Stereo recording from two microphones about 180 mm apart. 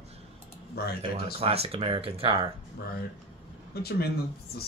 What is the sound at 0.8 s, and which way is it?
Speech, 60° left (ahead or behind).